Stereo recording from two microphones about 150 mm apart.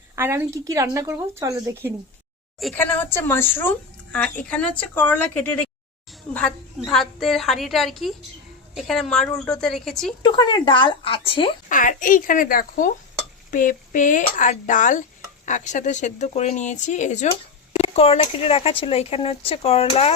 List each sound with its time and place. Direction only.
0.2 s speech: 15° right (ahead or behind)
2.7 s a woman's voice: 15° left (ahead or behind)
10.2 s speech: 30° left (ahead or behind)
11.7 s speech: 60° left (ahead or behind)
17.7 s speech: 40° left (ahead or behind)